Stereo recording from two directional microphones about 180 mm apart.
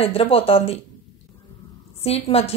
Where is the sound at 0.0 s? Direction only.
30° left (ahead or behind).